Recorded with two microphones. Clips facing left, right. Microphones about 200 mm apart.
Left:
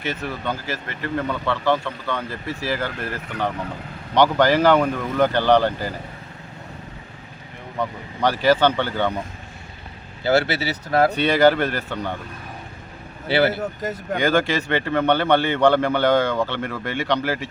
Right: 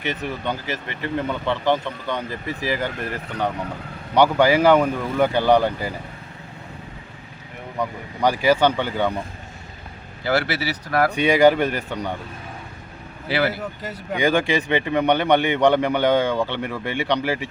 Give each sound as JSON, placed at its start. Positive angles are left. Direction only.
{"t": 0.1, "sound": "speech", "side_deg": -20}
{"t": 7.8, "sound": "speech", "side_deg": -10}
{"t": 10.2, "sound": "speech", "side_deg": 25}
{"t": 11.1, "sound": "speech", "side_deg": -15}
{"t": 13.2, "sound": "speech", "side_deg": 30}
{"t": 13.6, "sound": "speech", "side_deg": 45}
{"t": 14.2, "sound": "speech", "side_deg": -15}